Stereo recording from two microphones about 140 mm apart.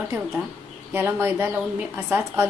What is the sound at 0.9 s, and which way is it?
A woman's voice, 15° right (ahead or behind).